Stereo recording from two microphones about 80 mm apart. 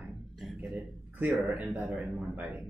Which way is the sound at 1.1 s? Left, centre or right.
Right.